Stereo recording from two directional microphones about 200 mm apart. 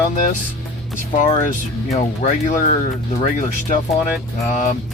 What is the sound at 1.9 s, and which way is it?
Speech, 35° left (ahead or behind).